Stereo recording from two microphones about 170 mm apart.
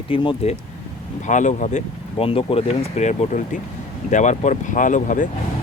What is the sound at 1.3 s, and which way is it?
Speech, 45° left (ahead or behind).